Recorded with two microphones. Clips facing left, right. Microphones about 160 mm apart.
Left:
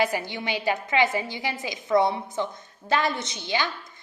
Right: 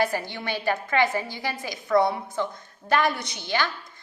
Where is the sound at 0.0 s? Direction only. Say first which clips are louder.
Even; 20° left (ahead or behind).